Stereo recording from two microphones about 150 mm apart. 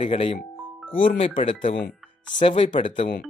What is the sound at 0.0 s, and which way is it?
Speech, 40° left (ahead or behind).